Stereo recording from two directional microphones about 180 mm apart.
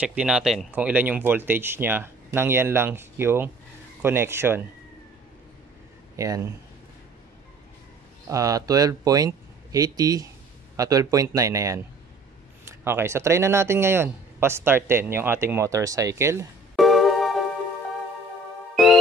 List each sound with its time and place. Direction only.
0.0 s speech: 5° right (ahead or behind)
6.1 s speech: 20° right (ahead or behind)
8.3 s speech: 20° right (ahead or behind)
16.7 s music: centre (ahead or behind)